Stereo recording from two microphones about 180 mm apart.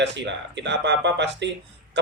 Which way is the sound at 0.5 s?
75° right (ahead or behind).